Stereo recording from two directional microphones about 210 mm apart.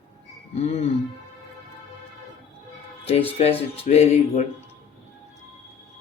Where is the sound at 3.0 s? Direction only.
30° left (ahead or behind).